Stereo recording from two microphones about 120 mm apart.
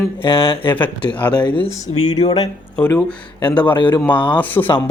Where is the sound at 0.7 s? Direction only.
15° left (ahead or behind).